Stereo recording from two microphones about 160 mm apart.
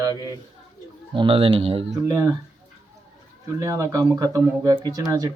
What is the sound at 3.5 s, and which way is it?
Speech, 20° right (ahead or behind).